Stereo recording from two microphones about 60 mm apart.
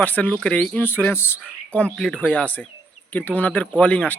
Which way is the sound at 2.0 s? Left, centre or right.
Centre.